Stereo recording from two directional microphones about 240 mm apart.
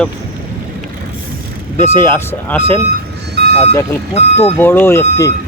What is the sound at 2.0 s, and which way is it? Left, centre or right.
Speech, centre.